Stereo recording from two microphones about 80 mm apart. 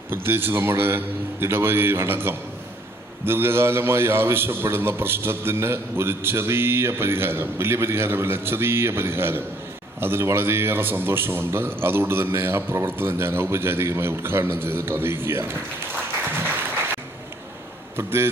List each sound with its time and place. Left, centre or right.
0.1 s a man's voice: right
16.4 s applause: right
17.9 s a man's voice: right